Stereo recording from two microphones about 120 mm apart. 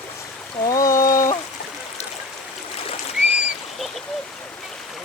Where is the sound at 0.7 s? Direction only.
30° left (ahead or behind).